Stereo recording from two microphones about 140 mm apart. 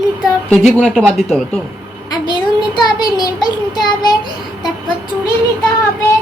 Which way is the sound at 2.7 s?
30° left (ahead or behind).